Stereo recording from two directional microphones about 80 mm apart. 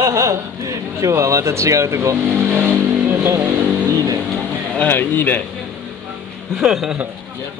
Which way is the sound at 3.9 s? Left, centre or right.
Right.